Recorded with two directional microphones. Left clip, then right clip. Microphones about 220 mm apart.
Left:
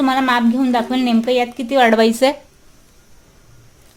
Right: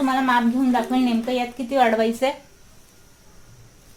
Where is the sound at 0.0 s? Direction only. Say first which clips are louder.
Left 4 dB; 50° left (ahead or behind).